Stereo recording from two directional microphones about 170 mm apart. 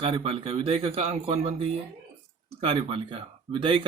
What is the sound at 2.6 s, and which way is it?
A man's voice, 30° right (ahead or behind).